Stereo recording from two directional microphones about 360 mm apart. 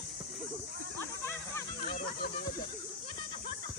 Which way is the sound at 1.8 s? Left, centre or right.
Left.